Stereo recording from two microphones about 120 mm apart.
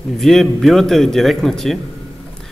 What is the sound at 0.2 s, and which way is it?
Speech, centre (ahead or behind).